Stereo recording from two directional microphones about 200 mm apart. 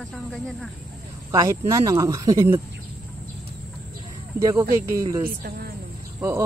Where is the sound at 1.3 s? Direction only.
15° right (ahead or behind).